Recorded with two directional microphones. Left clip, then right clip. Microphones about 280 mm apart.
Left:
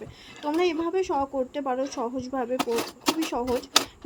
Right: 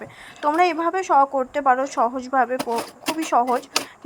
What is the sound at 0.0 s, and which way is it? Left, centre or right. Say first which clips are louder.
A woman's voice: right 9 dB; centre.